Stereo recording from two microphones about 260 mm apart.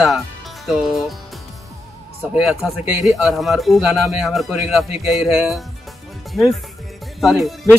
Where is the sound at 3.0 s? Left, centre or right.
Centre.